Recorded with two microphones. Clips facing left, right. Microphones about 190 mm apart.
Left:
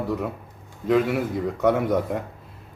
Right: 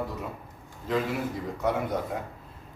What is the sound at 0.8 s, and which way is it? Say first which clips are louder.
Speech: left 7 dB; 70° left (ahead or behind).